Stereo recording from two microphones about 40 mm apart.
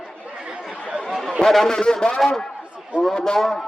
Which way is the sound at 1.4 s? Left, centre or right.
Centre.